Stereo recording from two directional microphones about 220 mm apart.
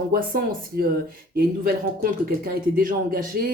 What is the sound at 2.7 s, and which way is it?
Speech, 40° right (ahead or behind).